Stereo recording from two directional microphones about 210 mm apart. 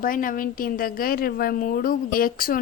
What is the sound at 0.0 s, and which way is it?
A woman's voice, 40° left (ahead or behind).